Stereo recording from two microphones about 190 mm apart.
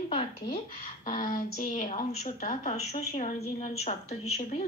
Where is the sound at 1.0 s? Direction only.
45° left (ahead or behind).